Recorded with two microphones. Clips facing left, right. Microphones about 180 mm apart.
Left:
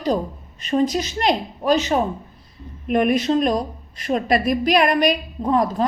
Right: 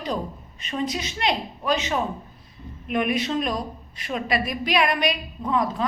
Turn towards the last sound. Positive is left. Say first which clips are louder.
# left 5 dB
turn(degrees=40)  # may be behind; listen again after turning